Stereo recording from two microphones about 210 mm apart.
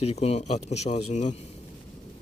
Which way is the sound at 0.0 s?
30° left (ahead or behind).